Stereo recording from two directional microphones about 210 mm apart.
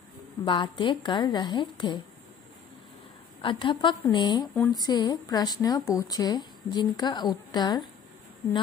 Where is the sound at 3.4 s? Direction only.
25° left (ahead or behind).